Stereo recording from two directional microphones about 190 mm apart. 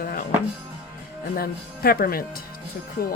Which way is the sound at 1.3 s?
55° left (ahead or behind).